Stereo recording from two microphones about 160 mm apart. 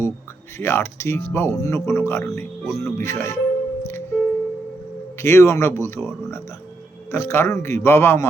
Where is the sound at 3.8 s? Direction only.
15° left (ahead or behind).